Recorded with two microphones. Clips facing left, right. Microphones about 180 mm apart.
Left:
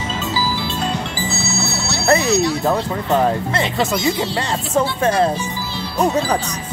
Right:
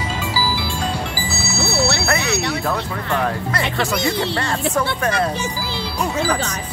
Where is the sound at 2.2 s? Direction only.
65° right (ahead or behind).